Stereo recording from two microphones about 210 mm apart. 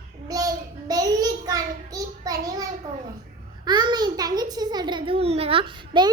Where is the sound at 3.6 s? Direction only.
20° right (ahead or behind).